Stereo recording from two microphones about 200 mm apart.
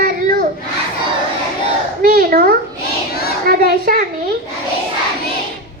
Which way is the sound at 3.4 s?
45° right (ahead or behind).